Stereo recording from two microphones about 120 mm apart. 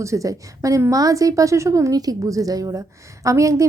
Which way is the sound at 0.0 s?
25° right (ahead or behind).